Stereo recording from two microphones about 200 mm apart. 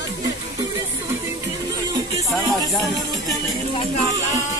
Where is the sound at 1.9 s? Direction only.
20° right (ahead or behind).